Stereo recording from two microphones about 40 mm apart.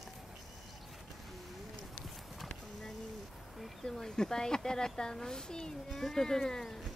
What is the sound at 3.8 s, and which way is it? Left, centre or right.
Speech, centre.